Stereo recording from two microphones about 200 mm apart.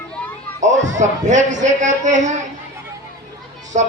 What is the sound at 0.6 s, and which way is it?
A man's voice, 35° right (ahead or behind).